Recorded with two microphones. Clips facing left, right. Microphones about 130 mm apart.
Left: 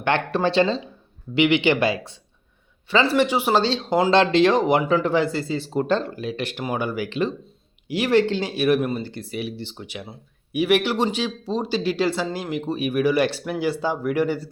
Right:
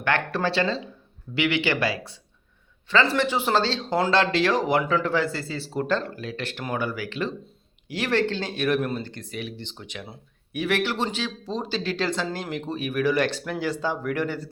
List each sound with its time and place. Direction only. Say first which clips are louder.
0.0 s speech: left 3 dB; 20° left (ahead or behind)